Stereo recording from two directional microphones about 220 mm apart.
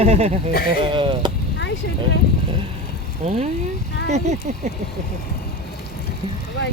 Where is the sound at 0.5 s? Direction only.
45° left (ahead or behind).